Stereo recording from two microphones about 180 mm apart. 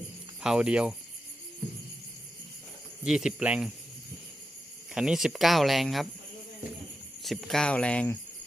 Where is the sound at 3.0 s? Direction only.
5° right (ahead or behind).